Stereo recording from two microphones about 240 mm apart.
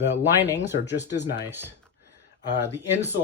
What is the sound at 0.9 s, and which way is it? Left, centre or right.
Speech, left.